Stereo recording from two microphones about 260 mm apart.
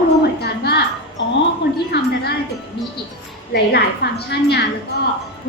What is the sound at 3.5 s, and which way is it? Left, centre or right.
A woman's voice, left.